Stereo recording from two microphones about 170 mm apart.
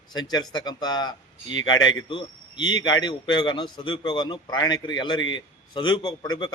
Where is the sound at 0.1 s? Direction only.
25° left (ahead or behind).